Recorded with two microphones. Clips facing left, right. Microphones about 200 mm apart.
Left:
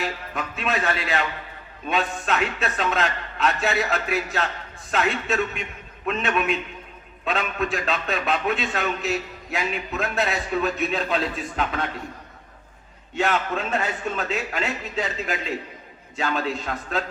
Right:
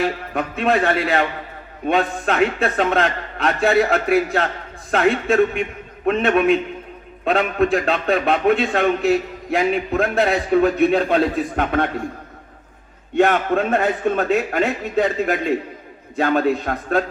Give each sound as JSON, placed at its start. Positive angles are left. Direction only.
{"t": 0.0, "sound": "a man's voice", "side_deg": -50}
{"t": 13.1, "sound": "a man's voice", "side_deg": -55}